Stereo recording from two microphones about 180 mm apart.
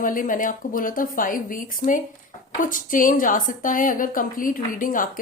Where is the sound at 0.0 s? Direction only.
50° left (ahead or behind).